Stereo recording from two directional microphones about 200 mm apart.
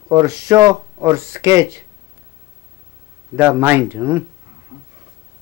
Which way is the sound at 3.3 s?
10° right (ahead or behind).